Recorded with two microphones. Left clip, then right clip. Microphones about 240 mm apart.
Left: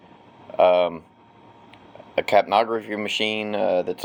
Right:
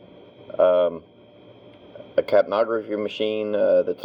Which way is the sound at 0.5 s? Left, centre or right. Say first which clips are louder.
Left 1 dB; left.